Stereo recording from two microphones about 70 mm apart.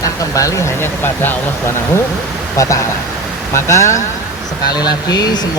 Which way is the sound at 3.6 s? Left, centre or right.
Left.